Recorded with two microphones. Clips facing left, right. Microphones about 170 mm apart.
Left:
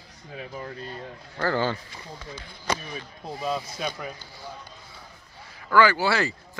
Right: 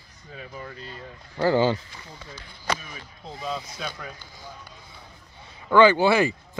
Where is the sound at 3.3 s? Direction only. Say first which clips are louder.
Left 3 dB; 10° left (ahead or behind).